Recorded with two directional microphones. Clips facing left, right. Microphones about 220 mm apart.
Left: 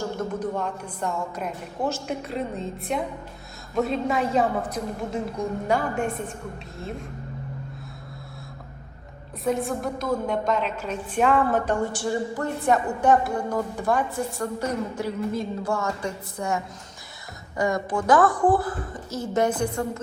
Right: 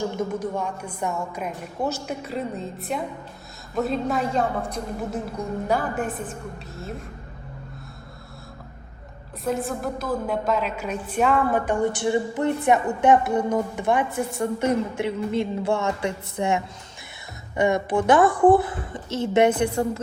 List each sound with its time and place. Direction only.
0.3 s a woman's voice: 10° right (ahead or behind)
9.4 s a woman's voice: centre (ahead or behind)
11.5 s a woman's voice: 15° right (ahead or behind)
17.6 s a woman's voice: 25° right (ahead or behind)